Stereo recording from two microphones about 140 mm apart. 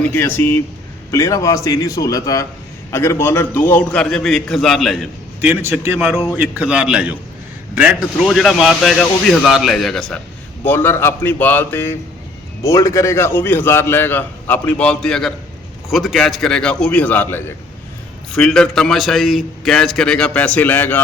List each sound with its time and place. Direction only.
0.0 s a man's voice: 15° left (ahead or behind)
5.4 s a man's voice: 15° right (ahead or behind)
8.3 s a man's voice: centre (ahead or behind)
10.6 s a man's voice: 15° left (ahead or behind)